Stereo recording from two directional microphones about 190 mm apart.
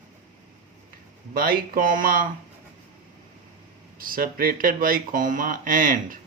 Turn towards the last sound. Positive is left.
turn(degrees=-50)  # may be behind; listen again after turning